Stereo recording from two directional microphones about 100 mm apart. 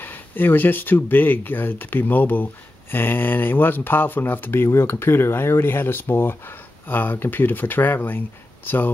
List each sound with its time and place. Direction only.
0.0 s speech: 20° left (ahead or behind)